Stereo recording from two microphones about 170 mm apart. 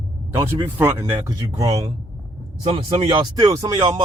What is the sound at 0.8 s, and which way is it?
Speech, 15° right (ahead or behind).